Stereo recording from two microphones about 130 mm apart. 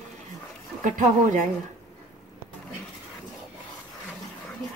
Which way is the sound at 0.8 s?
75° right (ahead or behind).